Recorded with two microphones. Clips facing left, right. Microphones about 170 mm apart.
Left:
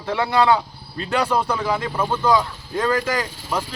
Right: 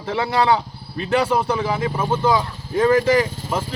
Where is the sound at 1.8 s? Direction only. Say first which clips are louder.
Right 2 dB; 20° right (ahead or behind).